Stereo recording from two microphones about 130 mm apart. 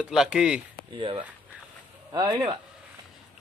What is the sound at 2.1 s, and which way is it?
Speech, 35° right (ahead or behind).